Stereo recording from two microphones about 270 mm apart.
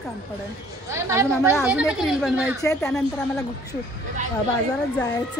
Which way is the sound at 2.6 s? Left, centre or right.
Centre.